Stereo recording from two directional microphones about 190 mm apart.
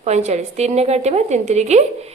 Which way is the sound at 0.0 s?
35° right (ahead or behind).